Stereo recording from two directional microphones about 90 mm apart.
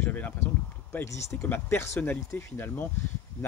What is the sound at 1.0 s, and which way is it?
Speech, 35° left (ahead or behind).